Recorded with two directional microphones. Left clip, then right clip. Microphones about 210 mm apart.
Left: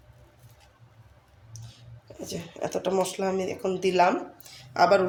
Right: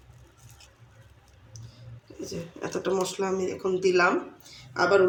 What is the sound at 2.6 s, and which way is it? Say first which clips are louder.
Speech: left 2 dB; 50° left (ahead or behind).